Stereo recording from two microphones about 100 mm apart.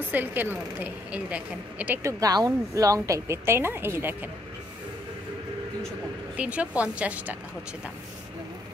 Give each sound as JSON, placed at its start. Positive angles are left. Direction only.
{"t": 0.1, "sound": "speech", "side_deg": -20}
{"t": 2.0, "sound": "speech", "side_deg": -35}
{"t": 6.3, "sound": "speech", "side_deg": -10}